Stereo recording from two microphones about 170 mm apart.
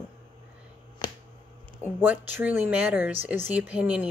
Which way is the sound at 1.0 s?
30° left (ahead or behind).